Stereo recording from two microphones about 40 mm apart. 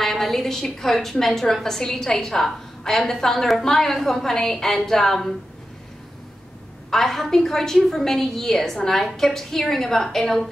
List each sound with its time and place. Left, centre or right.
0.0 s a sound: centre
0.7 s a woman's voice: centre
6.9 s a woman's voice: centre